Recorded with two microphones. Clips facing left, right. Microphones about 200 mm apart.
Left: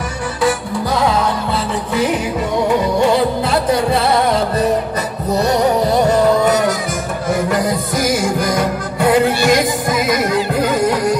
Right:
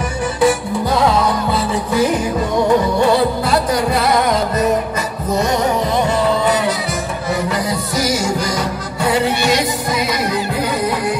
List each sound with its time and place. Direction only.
3.4 s music: 25° left (ahead or behind); by 11.1 s 45° left (ahead or behind)